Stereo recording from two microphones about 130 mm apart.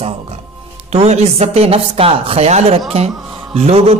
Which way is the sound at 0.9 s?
55° right (ahead or behind).